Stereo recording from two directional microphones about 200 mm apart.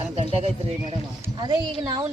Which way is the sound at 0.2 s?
30° right (ahead or behind).